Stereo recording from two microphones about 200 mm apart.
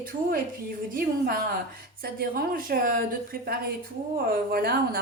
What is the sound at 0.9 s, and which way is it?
Speech, 45° right (ahead or behind).